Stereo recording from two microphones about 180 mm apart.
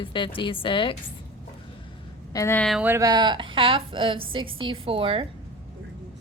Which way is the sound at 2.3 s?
15° left (ahead or behind).